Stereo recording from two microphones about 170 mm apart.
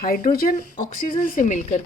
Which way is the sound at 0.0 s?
60° left (ahead or behind).